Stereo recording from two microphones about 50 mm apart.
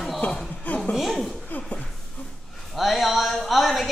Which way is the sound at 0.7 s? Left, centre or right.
Left.